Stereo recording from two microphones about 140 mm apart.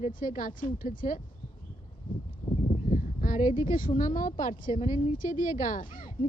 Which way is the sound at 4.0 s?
75° left (ahead or behind).